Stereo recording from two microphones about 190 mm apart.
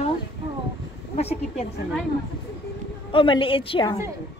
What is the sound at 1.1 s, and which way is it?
Speech, 35° left (ahead or behind).